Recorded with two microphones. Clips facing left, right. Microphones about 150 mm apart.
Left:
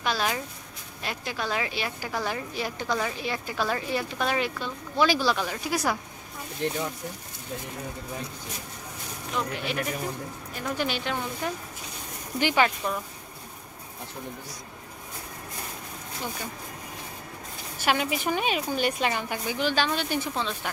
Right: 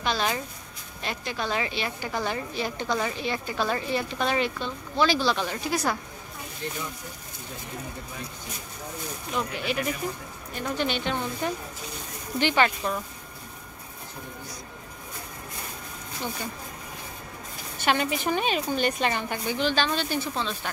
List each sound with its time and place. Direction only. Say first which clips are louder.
0.0 s speech: right 1 dB; 5° left (ahead or behind)
6.6 s speech: left 6 dB; 70° left (ahead or behind)
9.3 s speech: right 1 dB; centre (ahead or behind)
17.7 s a woman's voice: right 1 dB; 5° left (ahead or behind)